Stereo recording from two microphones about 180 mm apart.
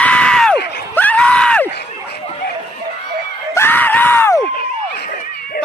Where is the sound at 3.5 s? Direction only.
10° left (ahead or behind).